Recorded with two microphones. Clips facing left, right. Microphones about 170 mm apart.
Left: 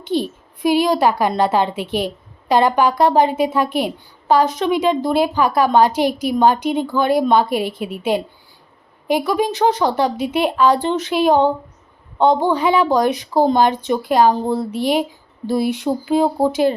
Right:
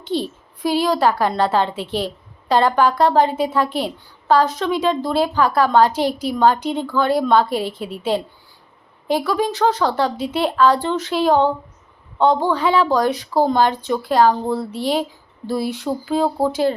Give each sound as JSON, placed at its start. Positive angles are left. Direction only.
{"t": 0.0, "sound": "a woman's voice", "side_deg": 15}